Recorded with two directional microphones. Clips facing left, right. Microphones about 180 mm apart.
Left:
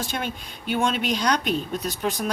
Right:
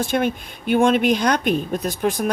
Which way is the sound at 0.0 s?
55° right (ahead or behind).